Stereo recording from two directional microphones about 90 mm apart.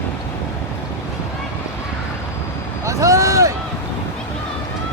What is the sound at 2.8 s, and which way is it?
Vehicle, 35° right (ahead or behind).